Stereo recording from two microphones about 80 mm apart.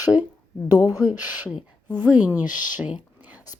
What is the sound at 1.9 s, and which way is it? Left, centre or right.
A woman's voice, right.